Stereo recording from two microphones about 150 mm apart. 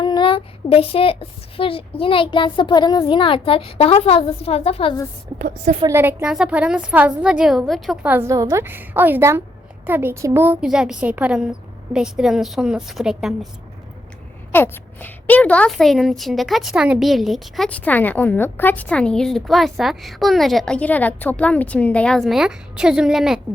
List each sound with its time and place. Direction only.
0.0 s speech: 30° left (ahead or behind)
5.4 s a woman's voice: 60° right (ahead or behind)
5.9 s a woman's voice: 15° right (ahead or behind)
8.1 s a woman's voice: 20° right (ahead or behind); by 13.5 s centre (ahead or behind)
14.5 s a woman's voice: 15° left (ahead or behind); by 23.4 s 5° right (ahead or behind)